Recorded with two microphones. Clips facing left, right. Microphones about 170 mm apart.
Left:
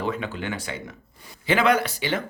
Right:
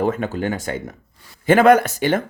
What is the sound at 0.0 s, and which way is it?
Speech, 45° right (ahead or behind).